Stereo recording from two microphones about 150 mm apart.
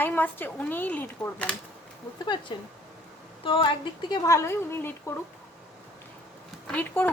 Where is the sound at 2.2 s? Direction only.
30° left (ahead or behind); by 4.9 s 15° left (ahead or behind).